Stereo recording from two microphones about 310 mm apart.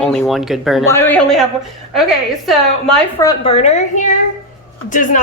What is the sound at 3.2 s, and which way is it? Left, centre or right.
A woman's voice, centre.